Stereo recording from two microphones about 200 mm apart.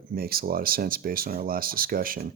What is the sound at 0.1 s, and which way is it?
Speech, 50° right (ahead or behind).